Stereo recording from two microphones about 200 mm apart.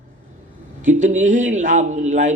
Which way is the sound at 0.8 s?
40° right (ahead or behind).